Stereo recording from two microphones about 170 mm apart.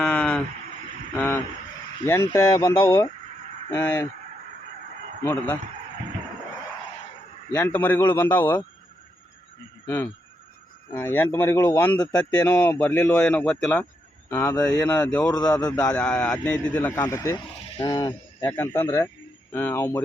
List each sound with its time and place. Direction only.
0.0 s a sound: 10° left (ahead or behind)
1.1 s vehicle: 5° left (ahead or behind)
2.3 s a man's voice: 15° left (ahead or behind)
5.2 s a man's voice: 10° left (ahead or behind)
7.5 s a man's voice: 10° left (ahead or behind)
9.8 s a man's voice: 15° left (ahead or behind)
18.3 s a man's voice: 10° left (ahead or behind)